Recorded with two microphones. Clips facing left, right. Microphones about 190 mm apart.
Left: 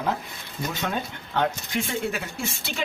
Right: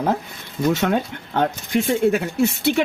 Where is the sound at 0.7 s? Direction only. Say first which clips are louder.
Right 10 dB; 90° right.